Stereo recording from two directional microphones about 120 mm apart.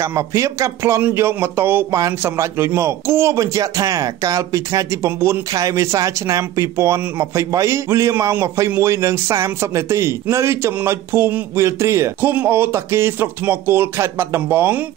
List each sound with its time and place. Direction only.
0.0 s a man's voice: 25° right (ahead or behind)